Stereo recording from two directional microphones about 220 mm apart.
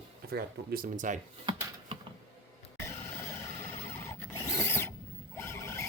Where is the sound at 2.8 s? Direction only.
10° left (ahead or behind).